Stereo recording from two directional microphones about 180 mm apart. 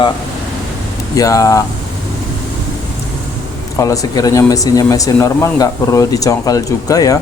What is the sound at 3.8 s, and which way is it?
Speech, 20° left (ahead or behind).